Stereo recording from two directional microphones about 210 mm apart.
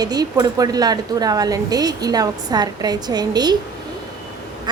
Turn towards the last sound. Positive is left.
turn(degrees=-20)  # may be behind; listen again after turning